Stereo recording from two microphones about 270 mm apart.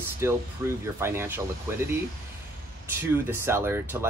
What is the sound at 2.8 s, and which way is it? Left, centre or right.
Speech, centre.